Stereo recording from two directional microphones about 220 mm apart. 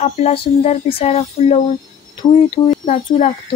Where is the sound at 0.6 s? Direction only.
25° left (ahead or behind).